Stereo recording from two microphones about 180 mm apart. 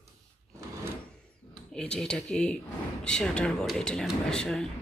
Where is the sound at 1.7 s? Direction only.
5° left (ahead or behind).